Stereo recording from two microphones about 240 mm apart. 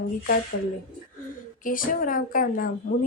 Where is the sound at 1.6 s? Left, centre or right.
Left.